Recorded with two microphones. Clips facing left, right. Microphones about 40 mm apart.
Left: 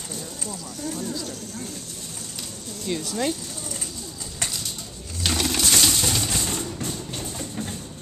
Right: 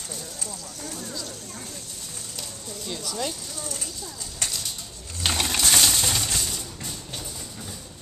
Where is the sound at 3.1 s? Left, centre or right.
Left.